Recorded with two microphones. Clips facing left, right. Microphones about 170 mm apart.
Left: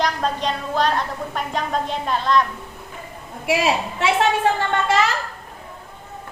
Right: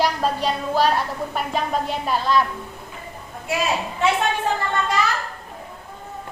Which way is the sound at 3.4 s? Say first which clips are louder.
Left 4 dB; 90° left.